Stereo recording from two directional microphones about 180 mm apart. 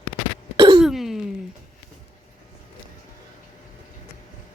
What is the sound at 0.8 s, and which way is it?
Throat clearing, centre (ahead or behind).